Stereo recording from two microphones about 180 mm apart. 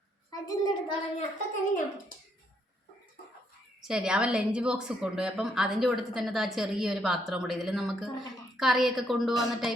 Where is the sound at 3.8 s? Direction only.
5° right (ahead or behind).